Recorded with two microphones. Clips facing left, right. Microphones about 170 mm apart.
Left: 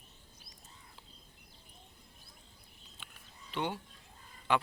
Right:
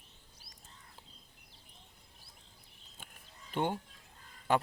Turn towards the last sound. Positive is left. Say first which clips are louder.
# right 1 dB
turn(degrees=-45)  # may be behind; listen again after turning